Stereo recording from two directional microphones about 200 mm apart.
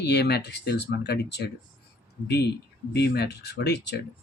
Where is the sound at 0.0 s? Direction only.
55° left (ahead or behind).